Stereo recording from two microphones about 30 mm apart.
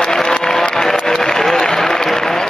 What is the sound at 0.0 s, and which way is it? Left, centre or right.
Applause, centre.